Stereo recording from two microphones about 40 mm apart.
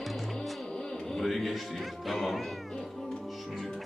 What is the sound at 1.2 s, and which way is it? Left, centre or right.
Music, centre.